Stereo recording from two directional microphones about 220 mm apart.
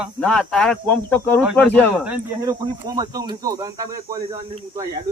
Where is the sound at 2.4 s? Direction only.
15° right (ahead or behind).